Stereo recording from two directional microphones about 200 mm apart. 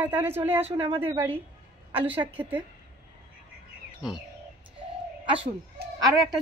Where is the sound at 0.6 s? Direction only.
25° right (ahead or behind).